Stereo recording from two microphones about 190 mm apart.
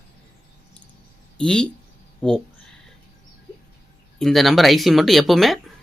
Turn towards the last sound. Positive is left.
turn(degrees=0)  # may be behind; listen again after turning